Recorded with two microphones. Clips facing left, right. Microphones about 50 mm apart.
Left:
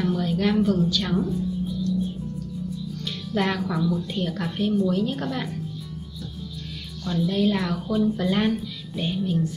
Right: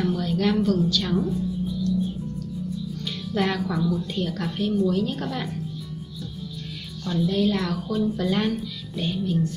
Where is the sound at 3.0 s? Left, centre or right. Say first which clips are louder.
Even; centre.